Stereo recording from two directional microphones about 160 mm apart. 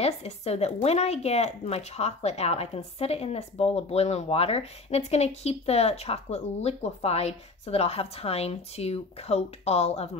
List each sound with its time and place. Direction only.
0.0 s speech: 40° left (ahead or behind)